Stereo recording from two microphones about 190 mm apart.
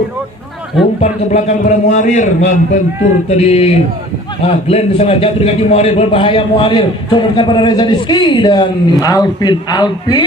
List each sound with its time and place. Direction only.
1.0 s a man's voice: 35° left (ahead or behind); by 10.2 s 20° left (ahead or behind)